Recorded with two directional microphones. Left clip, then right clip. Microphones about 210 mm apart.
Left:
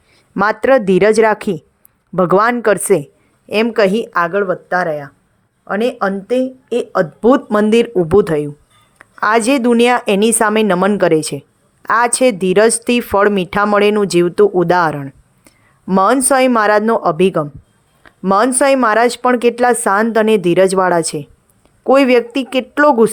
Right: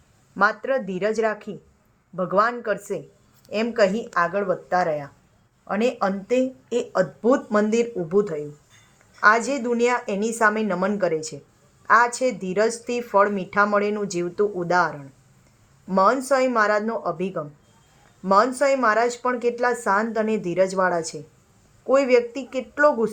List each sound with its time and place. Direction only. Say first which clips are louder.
0.3 s speech: left 9 dB; 50° left (ahead or behind)